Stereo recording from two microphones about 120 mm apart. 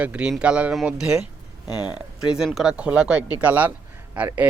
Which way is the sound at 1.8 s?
40° left (ahead or behind).